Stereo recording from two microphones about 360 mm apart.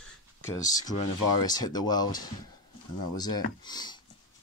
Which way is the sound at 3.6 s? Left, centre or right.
Centre.